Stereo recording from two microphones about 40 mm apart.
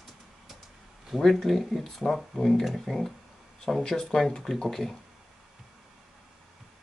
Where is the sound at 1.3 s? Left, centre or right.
Centre.